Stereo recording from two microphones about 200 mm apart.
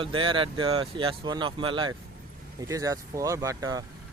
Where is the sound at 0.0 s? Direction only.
25° right (ahead or behind).